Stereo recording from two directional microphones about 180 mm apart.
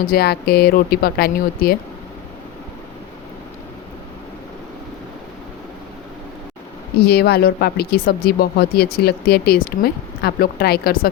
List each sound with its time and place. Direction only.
0.0 s speech: 60° left (ahead or behind)
7.1 s speech: 65° left (ahead or behind)